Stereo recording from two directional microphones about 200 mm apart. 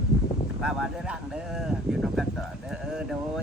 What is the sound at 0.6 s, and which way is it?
Speech, 5° right (ahead or behind).